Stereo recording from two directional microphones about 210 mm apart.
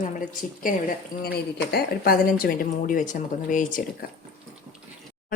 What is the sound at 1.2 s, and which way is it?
Speech, 50° left (ahead or behind).